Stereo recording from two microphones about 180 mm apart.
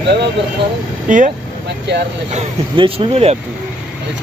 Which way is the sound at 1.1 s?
45° right (ahead or behind).